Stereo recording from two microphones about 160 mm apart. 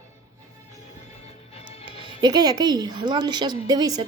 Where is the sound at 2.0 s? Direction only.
25° right (ahead or behind).